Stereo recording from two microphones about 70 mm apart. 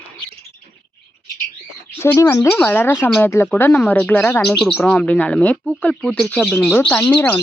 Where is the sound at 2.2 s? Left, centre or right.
Left.